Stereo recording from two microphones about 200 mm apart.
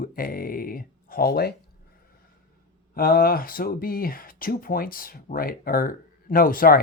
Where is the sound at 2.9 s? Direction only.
45° left (ahead or behind).